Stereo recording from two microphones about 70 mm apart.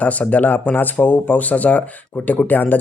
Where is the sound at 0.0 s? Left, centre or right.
Left.